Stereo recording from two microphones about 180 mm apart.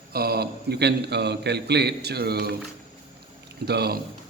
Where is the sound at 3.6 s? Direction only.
65° right (ahead or behind).